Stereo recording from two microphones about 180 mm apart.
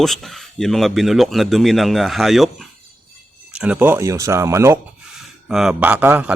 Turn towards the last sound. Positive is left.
turn(degrees=-10)  # may be behind; listen again after turning